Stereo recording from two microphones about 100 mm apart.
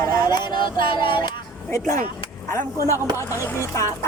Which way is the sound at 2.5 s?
30° left (ahead or behind).